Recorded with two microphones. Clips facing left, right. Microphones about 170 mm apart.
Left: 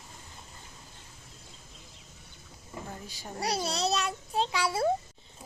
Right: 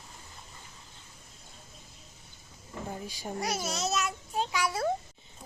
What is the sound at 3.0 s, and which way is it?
Speech, 15° right (ahead or behind).